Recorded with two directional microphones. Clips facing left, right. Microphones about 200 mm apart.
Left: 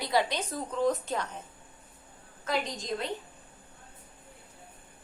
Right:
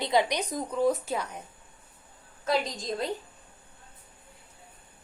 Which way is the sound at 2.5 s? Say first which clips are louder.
Right 3 dB; 35° right (ahead or behind).